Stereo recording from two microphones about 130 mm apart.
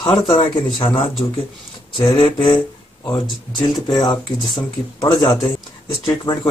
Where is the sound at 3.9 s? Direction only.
35° left (ahead or behind).